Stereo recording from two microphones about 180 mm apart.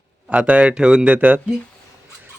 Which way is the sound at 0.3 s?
5° right (ahead or behind).